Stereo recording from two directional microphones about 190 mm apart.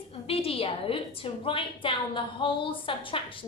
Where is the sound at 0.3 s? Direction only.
30° left (ahead or behind).